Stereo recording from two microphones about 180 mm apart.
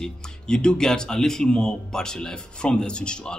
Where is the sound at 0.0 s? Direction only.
5° left (ahead or behind).